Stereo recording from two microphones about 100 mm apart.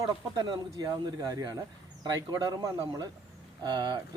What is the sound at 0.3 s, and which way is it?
Speech, 45° right (ahead or behind).